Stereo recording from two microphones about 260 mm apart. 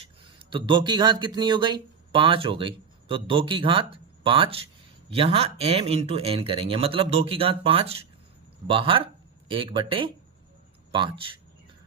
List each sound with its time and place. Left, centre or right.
0.0 s speech: centre